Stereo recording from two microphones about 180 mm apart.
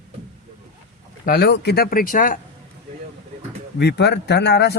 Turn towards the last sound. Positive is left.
turn(degrees=70)  # may be behind; listen again after turning